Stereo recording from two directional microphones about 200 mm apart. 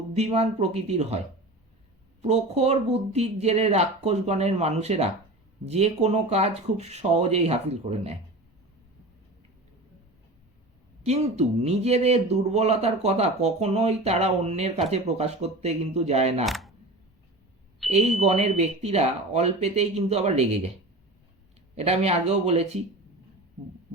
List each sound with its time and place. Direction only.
0.2 s a man's voice: 30° right (ahead or behind)
2.2 s a man's voice: 35° right (ahead or behind)
11.0 s a man's voice: 30° right (ahead or behind)
16.5 s speech: centre (ahead or behind)
17.9 s a man's voice: 35° right (ahead or behind)
21.8 s a man's voice: 35° right (ahead or behind)